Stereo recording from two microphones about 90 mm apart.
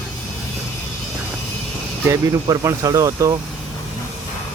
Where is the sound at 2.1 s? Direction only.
35° right (ahead or behind).